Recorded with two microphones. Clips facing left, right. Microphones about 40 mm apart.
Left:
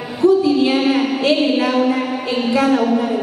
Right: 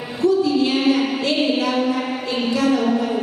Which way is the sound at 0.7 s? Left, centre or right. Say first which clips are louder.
Left 2 dB; centre.